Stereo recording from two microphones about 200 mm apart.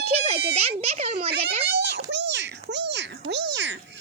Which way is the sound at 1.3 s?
55° right (ahead or behind).